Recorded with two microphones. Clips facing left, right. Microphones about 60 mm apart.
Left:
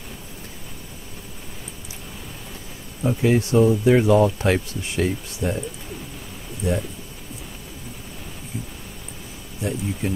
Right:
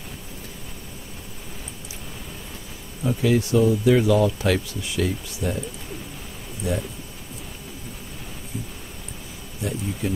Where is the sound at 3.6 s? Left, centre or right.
Left.